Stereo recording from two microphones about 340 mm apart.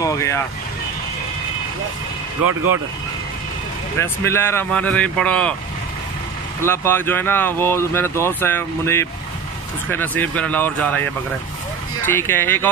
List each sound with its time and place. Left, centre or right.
0.0 s speech: centre
2.4 s speech: right
4.0 s speech: centre
6.6 s speech: centre
12.1 s speech: centre